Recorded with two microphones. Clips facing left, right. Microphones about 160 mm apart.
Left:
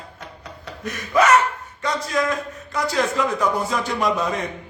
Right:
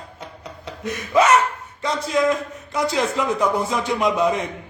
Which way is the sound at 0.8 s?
25° right (ahead or behind).